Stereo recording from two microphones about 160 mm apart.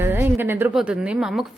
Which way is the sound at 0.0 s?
15° right (ahead or behind).